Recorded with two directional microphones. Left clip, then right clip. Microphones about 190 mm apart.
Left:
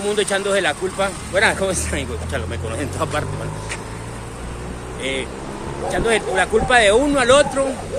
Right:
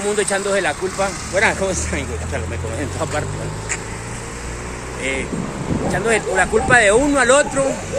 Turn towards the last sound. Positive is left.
turn(degrees=-5)  # may be behind; listen again after turning